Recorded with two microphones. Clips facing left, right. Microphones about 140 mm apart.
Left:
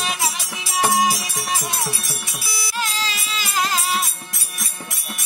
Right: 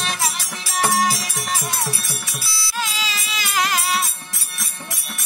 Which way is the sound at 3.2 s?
90° right.